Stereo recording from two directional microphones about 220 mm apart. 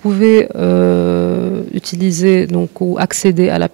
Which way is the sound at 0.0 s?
15° right (ahead or behind).